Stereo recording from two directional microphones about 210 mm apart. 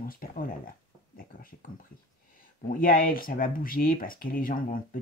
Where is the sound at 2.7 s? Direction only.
45° left (ahead or behind).